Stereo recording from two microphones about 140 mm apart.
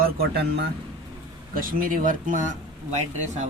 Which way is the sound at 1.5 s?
85° right.